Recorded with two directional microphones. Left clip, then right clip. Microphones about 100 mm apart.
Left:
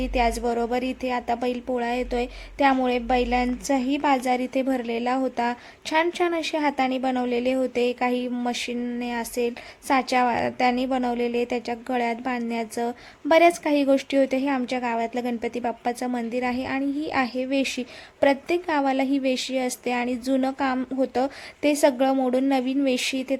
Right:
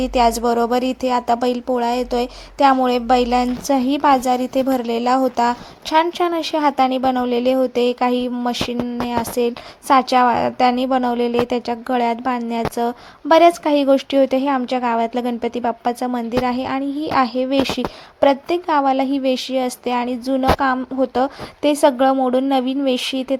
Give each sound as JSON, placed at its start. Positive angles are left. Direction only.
{"t": 0.0, "sound": "a woman's voice", "side_deg": -25}